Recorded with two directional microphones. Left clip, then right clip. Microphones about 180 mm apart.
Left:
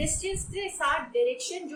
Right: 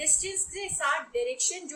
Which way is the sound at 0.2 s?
10° right (ahead or behind).